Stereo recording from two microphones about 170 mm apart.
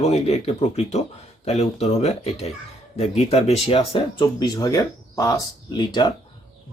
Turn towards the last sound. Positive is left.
turn(degrees=25)  # may be behind; listen again after turning